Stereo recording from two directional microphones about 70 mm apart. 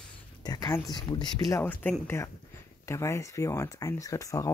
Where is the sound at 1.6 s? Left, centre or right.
Left.